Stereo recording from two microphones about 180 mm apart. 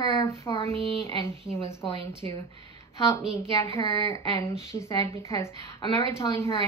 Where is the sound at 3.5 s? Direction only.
15° left (ahead or behind).